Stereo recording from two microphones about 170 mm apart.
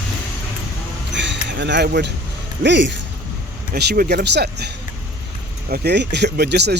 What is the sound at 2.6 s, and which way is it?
Speech, 90° right.